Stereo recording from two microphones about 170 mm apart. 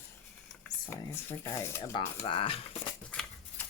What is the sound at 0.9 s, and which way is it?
Speech, 15° left (ahead or behind).